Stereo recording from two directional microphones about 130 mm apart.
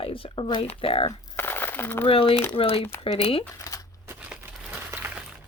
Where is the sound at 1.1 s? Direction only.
15° left (ahead or behind).